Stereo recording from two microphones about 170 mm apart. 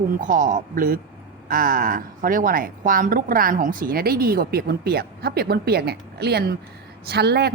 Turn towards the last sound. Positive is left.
turn(degrees=-70)  # may be behind; listen again after turning